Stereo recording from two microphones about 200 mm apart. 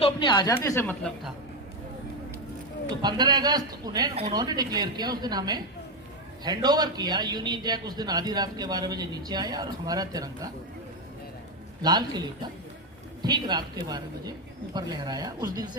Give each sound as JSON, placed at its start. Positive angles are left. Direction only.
{"t": 0.0, "sound": "speech", "side_deg": 25}
{"t": 2.9, "sound": "a man's voice", "side_deg": -20}
{"t": 4.1, "sound": "speech", "side_deg": -30}
{"t": 4.4, "sound": "a man's voice", "side_deg": -20}
{"t": 11.8, "sound": "a man's voice", "side_deg": -20}